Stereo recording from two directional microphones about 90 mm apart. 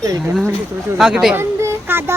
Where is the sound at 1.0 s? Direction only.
5° right (ahead or behind).